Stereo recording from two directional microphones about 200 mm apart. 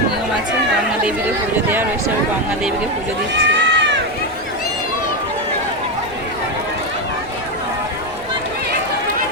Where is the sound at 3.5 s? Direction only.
60° right (ahead or behind).